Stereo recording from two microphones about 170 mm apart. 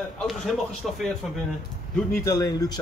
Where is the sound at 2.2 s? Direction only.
20° left (ahead or behind).